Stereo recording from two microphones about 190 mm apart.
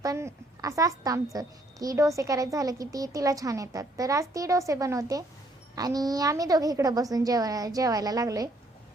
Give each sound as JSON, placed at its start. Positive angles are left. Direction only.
{"t": 0.0, "sound": "a woman's voice", "side_deg": -20}